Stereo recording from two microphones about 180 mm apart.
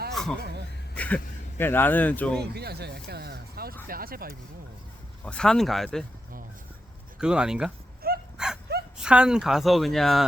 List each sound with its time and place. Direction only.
0.1 s a sound: centre (ahead or behind)
0.9 s speech: 10° left (ahead or behind)
2.4 s speech: 65° right (ahead or behind)
5.2 s speech: 5° left (ahead or behind)
7.2 s speech: 5° right (ahead or behind)
8.0 s dog: 55° right (ahead or behind)
8.4 s dog: 5° right (ahead or behind)
9.0 s speech: 5° right (ahead or behind)